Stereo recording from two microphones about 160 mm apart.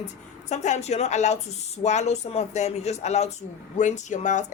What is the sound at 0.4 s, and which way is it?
A woman's voice, 45° left (ahead or behind).